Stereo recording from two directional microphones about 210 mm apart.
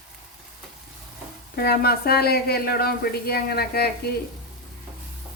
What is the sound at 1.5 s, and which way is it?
A woman's voice, 45° left (ahead or behind).